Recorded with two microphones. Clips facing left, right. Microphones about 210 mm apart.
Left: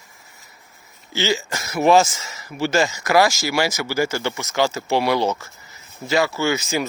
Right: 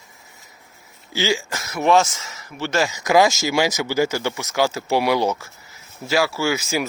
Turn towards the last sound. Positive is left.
turn(degrees=-5)  # may be behind; listen again after turning